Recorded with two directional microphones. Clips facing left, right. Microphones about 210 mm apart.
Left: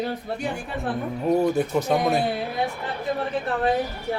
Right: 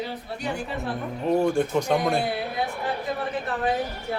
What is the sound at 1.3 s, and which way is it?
Speech, 5° left (ahead or behind).